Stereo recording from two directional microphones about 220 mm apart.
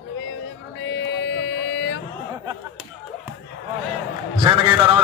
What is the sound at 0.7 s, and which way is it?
Mantra, 55° left (ahead or behind).